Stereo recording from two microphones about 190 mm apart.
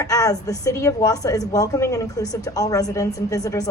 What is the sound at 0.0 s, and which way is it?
A woman's voice, 20° left (ahead or behind).